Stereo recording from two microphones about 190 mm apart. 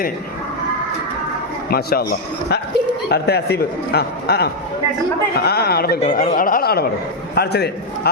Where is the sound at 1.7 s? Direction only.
55° left (ahead or behind).